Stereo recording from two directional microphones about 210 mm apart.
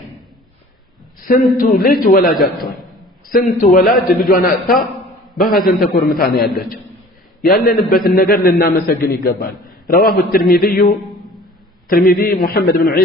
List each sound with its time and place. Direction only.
1.3 s a man's voice: 40° left (ahead or behind)
5.5 s a man's voice: 40° left (ahead or behind)